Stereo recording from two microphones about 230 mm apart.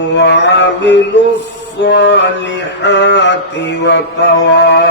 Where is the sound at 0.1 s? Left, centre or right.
Left.